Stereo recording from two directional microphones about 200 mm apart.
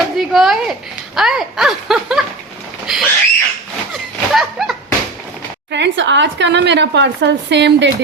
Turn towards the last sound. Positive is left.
turn(degrees=-60)  # may be behind; listen again after turning